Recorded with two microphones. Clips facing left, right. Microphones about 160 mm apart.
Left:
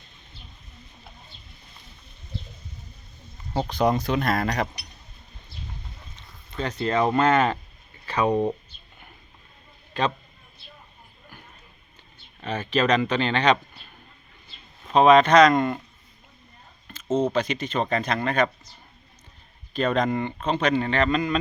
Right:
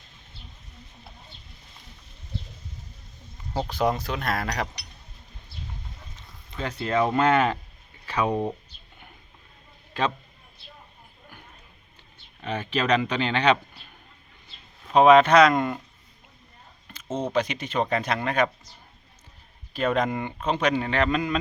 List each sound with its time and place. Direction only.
3.7 s speech: 5° right (ahead or behind)
6.6 s speech: 10° right (ahead or behind)
8.0 s a sound: 10° right (ahead or behind)
12.4 s speech: 15° right (ahead or behind)
14.9 s speech: 10° right (ahead or behind)
16.9 s a sound: 10° right (ahead or behind)
17.3 s speech: 10° right (ahead or behind)
19.7 s speech: 10° right (ahead or behind)